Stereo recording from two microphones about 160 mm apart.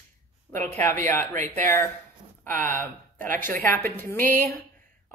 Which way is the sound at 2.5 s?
55° right (ahead or behind).